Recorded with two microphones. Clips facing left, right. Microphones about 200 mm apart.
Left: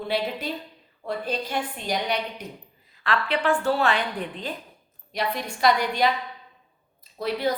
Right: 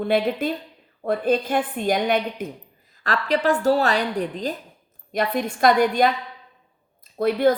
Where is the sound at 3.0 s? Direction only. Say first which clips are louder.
Right 3 dB; 40° right (ahead or behind).